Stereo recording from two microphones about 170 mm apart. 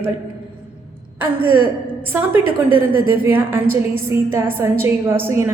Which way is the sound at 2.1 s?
10° right (ahead or behind).